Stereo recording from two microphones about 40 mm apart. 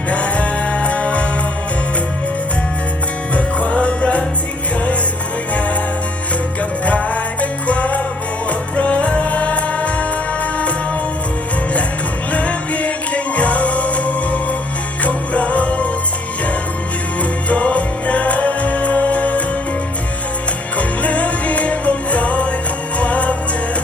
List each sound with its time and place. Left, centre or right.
0.1 s music: left
3.3 s music: left
6.8 s music: left
12.3 s music: left
17.5 s music: left
20.7 s music: left